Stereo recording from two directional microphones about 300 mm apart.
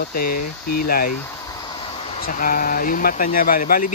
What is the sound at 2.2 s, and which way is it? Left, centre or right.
Speech, left.